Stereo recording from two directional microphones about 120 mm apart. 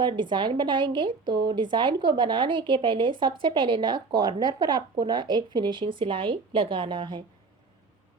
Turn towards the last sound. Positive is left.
turn(degrees=-40)  # may be behind; listen again after turning